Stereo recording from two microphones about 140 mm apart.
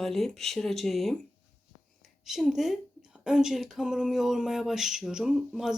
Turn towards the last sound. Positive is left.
turn(degrees=-5)  # may be behind; listen again after turning